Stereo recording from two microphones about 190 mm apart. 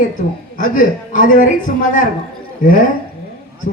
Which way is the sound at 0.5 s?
45° left (ahead or behind).